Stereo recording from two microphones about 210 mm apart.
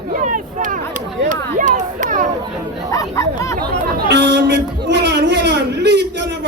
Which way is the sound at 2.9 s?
15° left (ahead or behind).